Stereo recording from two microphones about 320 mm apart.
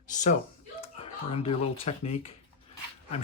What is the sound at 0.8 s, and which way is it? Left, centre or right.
Speech, centre.